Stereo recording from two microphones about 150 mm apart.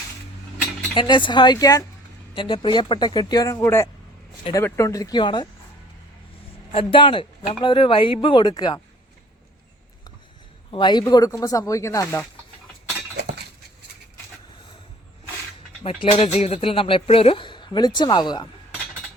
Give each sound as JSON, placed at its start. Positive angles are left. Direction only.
{"t": 0.9, "sound": "speech", "side_deg": 30}
{"t": 6.7, "sound": "speech", "side_deg": 35}
{"t": 10.7, "sound": "speech", "side_deg": 30}
{"t": 15.8, "sound": "speech", "side_deg": 40}